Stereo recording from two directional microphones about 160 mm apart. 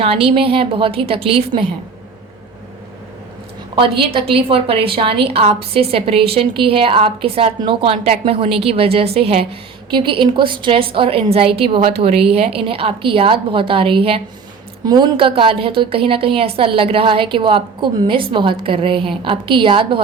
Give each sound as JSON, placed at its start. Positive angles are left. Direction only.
{"t": 0.0, "sound": "a woman's voice", "side_deg": -35}
{"t": 3.8, "sound": "a woman's voice", "side_deg": -35}